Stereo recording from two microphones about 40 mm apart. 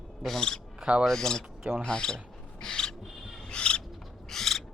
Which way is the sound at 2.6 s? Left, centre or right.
Centre.